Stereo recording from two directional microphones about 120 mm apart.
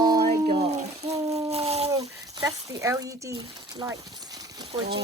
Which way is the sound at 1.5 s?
60° right (ahead or behind).